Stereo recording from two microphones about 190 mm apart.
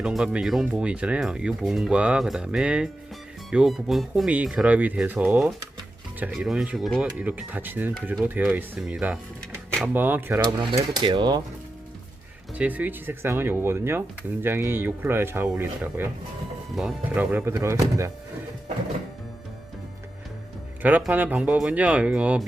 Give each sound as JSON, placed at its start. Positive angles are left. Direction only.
{"t": 0.0, "sound": "speech", "side_deg": -5}
{"t": 10.4, "sound": "speech", "side_deg": -25}
{"t": 12.5, "sound": "speech", "side_deg": -10}
{"t": 20.8, "sound": "speech", "side_deg": -10}